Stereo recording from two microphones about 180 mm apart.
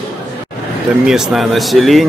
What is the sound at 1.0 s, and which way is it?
Speech, centre (ahead or behind).